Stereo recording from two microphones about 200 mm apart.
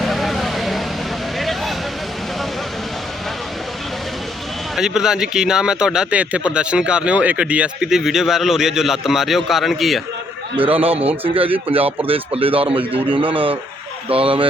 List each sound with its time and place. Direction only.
0.0 s a sound: centre (ahead or behind)
4.7 s speech: centre (ahead or behind)
11.7 s speech: 30° right (ahead or behind)